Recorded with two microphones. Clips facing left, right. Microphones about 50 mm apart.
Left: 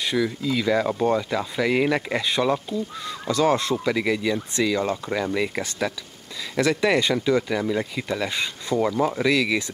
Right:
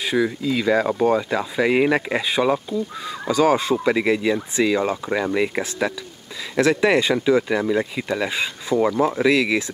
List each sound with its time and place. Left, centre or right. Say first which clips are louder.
0.0 s speech: right 3 dB; centre